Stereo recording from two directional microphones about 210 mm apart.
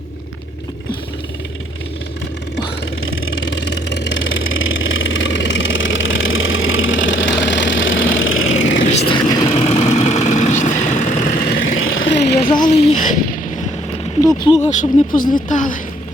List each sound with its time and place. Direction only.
3.1 s vehicle: 65° left (ahead or behind)
8.9 s vehicle: 30° left (ahead or behind)
11.6 s vehicle: 70° left (ahead or behind)
12.5 s a sound: 35° left (ahead or behind)
14.5 s speech: 35° left (ahead or behind)